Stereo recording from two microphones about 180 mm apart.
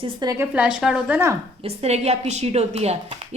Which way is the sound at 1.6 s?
35° right (ahead or behind).